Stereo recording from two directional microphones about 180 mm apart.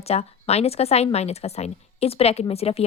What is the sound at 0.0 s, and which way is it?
A woman's voice, 35° left (ahead or behind).